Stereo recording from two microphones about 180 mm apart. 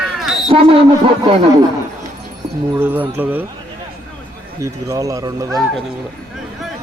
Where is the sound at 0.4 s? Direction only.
30° right (ahead or behind).